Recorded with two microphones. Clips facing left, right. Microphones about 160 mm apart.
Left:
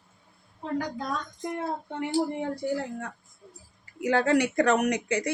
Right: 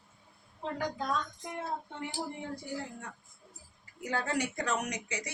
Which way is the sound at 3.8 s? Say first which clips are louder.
Left 10 dB; 75° left (ahead or behind).